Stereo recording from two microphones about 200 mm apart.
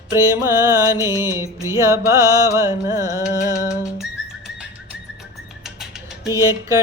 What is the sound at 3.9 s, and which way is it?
Bird, centre (ahead or behind).